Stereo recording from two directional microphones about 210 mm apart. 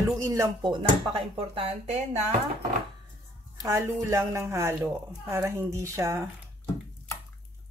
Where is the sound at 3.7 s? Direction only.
15° right (ahead or behind).